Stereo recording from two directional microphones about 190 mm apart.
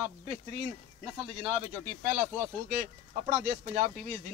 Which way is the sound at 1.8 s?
45° right (ahead or behind).